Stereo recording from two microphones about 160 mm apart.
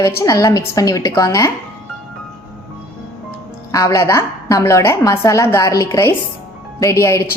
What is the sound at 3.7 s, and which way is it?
A woman's voice, 20° left (ahead or behind).